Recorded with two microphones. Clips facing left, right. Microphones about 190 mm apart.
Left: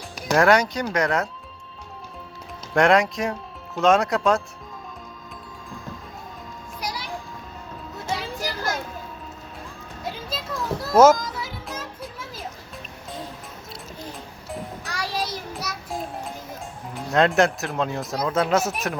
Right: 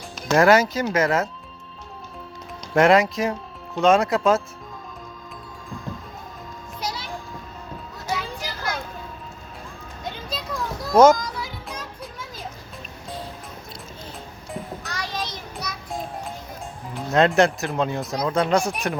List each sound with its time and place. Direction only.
0.3 s speech: centre (ahead or behind)
2.7 s speech: centre (ahead or behind)
6.7 s children playing: 25° right (ahead or behind)
8.0 s children playing: 35° left (ahead or behind)
10.0 s music: 5° left (ahead or behind)
14.8 s child singing: 10° left (ahead or behind)
16.9 s speech: centre (ahead or behind)